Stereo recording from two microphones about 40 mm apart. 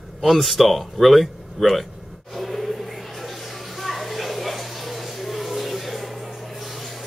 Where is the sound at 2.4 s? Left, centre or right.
Centre.